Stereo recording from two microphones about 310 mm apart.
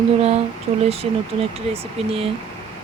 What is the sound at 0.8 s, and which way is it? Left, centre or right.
Speech, centre.